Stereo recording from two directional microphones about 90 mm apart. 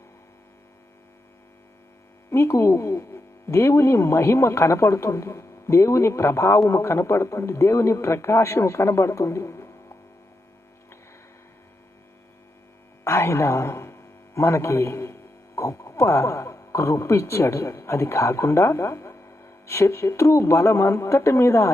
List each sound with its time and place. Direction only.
2.3 s a woman's voice: 30° left (ahead or behind)
13.1 s a man's voice: 30° left (ahead or behind)